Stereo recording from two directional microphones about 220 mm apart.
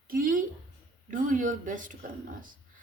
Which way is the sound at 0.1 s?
40° right (ahead or behind).